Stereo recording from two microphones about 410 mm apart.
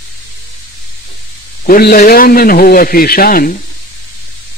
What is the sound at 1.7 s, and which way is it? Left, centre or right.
A man's voice, left.